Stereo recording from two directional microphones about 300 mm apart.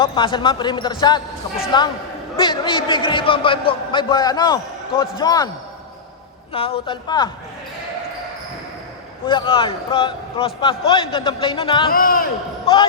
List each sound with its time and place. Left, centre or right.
0.0 s a man's voice: centre
6.5 s a man's voice: centre
9.2 s a man's voice: centre
11.9 s speech: left